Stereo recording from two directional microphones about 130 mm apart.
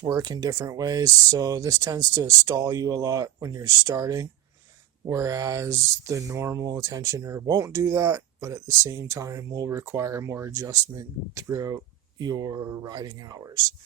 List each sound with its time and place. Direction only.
0.0 s speech: 30° right (ahead or behind)